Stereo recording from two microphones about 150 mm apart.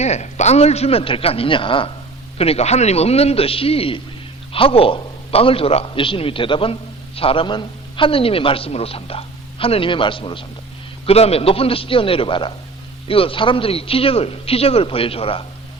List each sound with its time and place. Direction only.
0.0 s a man's voice: 50° left (ahead or behind)